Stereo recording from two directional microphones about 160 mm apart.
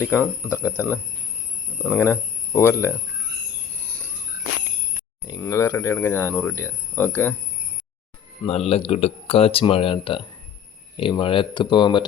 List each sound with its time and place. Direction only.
0.2 s speech: 10° right (ahead or behind)
0.6 s speech: 15° left (ahead or behind)
5.3 s speech: 15° left (ahead or behind)
8.4 s speech: 40° left (ahead or behind)